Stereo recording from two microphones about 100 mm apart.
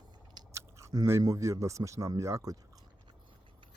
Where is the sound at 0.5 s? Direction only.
30° right (ahead or behind).